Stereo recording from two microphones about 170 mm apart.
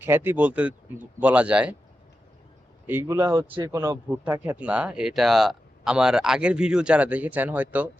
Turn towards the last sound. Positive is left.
turn(degrees=-10)  # may be behind; listen again after turning